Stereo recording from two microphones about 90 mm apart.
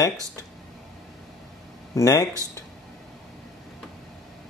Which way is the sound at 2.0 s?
40° left (ahead or behind).